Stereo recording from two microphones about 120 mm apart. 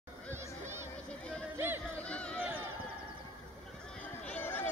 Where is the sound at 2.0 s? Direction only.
10° left (ahead or behind).